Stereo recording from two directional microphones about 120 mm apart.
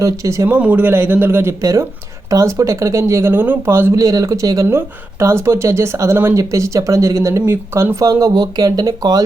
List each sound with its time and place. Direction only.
0.0 s speech: 25° right (ahead or behind)
0.5 s speech: 15° right (ahead or behind); by 9.2 s 30° right (ahead or behind)